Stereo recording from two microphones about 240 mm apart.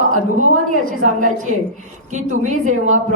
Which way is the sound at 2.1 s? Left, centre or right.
Right.